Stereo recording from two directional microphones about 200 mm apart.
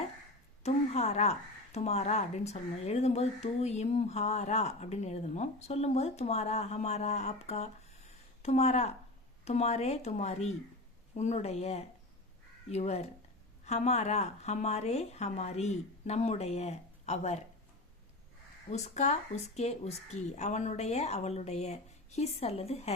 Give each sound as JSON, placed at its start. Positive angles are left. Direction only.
{"t": 0.6, "sound": "speech", "side_deg": 30}
{"t": 18.7, "sound": "speech", "side_deg": 35}